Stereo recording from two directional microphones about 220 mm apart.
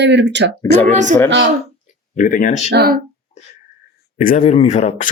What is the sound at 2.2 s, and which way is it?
Speech, 35° left (ahead or behind).